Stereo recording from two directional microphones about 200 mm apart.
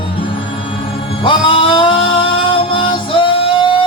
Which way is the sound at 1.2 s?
25° left (ahead or behind).